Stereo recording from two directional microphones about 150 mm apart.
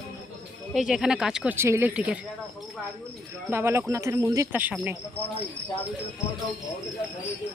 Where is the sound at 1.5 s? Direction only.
15° right (ahead or behind).